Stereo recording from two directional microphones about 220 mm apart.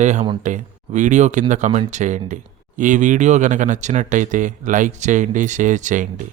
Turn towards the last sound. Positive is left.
turn(degrees=-35)  # may be behind; listen again after turning